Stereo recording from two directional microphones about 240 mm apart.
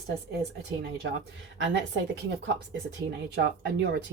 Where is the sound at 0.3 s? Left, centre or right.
Right.